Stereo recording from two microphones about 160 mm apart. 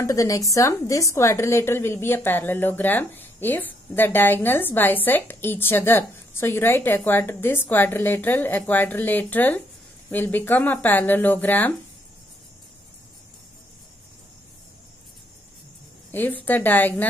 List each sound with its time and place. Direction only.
0.0 s a woman's voice: 20° left (ahead or behind)
16.1 s a woman's voice: 10° left (ahead or behind)